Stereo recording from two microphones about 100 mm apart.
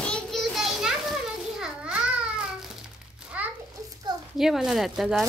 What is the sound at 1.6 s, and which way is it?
Babbling, 10° right (ahead or behind).